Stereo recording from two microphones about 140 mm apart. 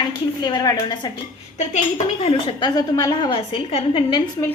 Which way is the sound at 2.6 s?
30° left (ahead or behind).